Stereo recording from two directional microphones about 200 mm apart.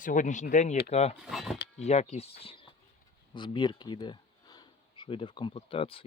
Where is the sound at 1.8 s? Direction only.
35° left (ahead or behind).